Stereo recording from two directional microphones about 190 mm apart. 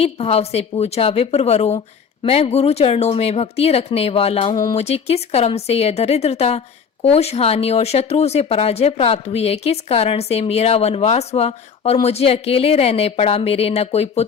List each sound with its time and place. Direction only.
0.0 s speech: 30° left (ahead or behind)
4.5 s speech: 20° left (ahead or behind)
4.8 s speech: 35° left (ahead or behind)